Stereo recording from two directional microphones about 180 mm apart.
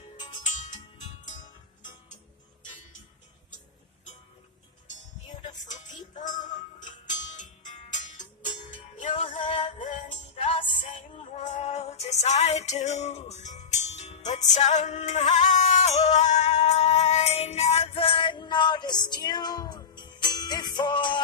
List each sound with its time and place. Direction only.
0.6 s music: 40° left (ahead or behind)
5.9 s music: 45° left (ahead or behind)
9.4 s music: 30° left (ahead or behind)
10.3 s music: 40° left (ahead or behind)